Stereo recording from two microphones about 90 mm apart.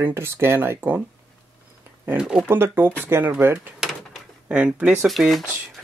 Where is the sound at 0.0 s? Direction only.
25° right (ahead or behind).